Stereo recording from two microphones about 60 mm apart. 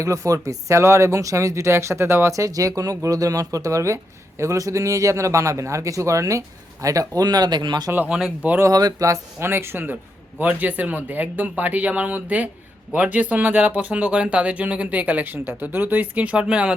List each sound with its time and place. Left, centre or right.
0.0 s speech: right
2.3 s speech: right
8.6 s speech: right
9.4 s speech: right; by 16.7 s centre